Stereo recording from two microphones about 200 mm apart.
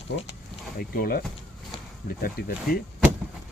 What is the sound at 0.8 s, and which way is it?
Speech, 45° left (ahead or behind).